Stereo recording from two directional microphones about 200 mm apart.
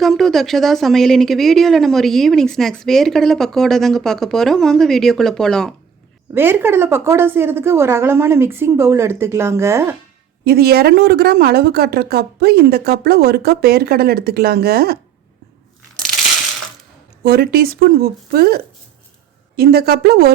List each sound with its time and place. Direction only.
0.0 s speech: centre (ahead or behind)
6.3 s a woman's voice: 10° right (ahead or behind)
10.4 s a woman's voice: 50° right (ahead or behind)
17.2 s a woman's voice: 50° right (ahead or behind)